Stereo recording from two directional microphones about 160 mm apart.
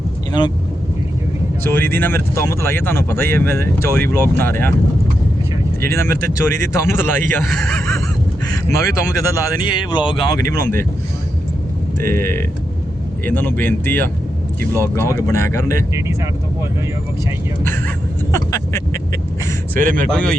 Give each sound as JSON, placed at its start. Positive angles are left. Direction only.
{"t": 1.6, "sound": "speech", "side_deg": 15}
{"t": 5.8, "sound": "speech", "side_deg": 15}
{"t": 8.4, "sound": "speech", "side_deg": 20}
{"t": 10.5, "sound": "speech", "side_deg": 15}
{"t": 11.9, "sound": "speech", "side_deg": 15}
{"t": 15.1, "sound": "speech", "side_deg": 15}
{"t": 18.3, "sound": "vehicle", "side_deg": 20}
{"t": 19.7, "sound": "speech", "side_deg": -60}
{"t": 20.1, "sound": "speech", "side_deg": 5}